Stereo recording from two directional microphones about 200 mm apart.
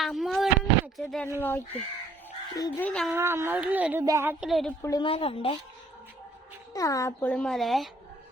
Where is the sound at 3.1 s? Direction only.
10° right (ahead or behind).